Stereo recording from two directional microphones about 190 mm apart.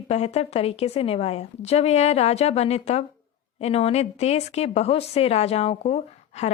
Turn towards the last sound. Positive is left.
turn(degrees=35)  # may be behind; listen again after turning